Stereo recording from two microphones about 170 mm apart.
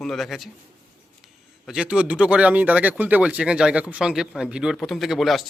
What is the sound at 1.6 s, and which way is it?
Speech, 5° right (ahead or behind).